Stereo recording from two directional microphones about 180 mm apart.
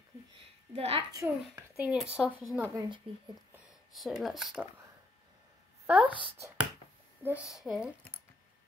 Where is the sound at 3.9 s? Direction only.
Centre (ahead or behind).